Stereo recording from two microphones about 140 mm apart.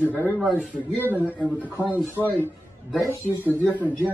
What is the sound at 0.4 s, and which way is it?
Speech, 5° right (ahead or behind).